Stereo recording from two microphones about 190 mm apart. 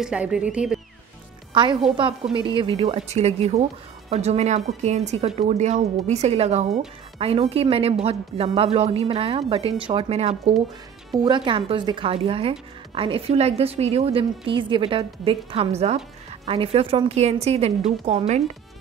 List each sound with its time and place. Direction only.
0.0 s speech: 5° right (ahead or behind)
1.5 s a woman's voice: 25° right (ahead or behind)